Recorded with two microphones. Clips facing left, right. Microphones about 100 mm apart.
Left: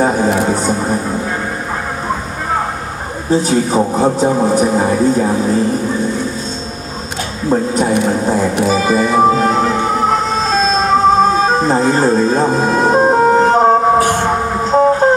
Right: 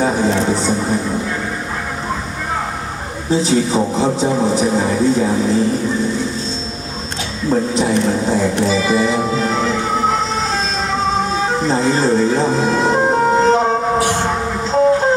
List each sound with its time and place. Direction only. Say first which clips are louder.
0.0 s music: left 3 dB; 45° left (ahead or behind)
0.4 s a sound: left 2 dB; 45° left (ahead or behind)
3.3 s speech: left 2 dB; 45° left (ahead or behind)
7.5 s speech: left 2 dB; 45° left (ahead or behind)
8.6 s music: left 2 dB; 45° left (ahead or behind)
13.1 s emergency vehicle: left 3 dB; 45° left (ahead or behind)
14.6 s music: left 2 dB; 45° left (ahead or behind)